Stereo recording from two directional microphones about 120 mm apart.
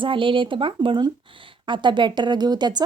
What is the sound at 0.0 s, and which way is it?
A woman's voice, 45° right (ahead or behind).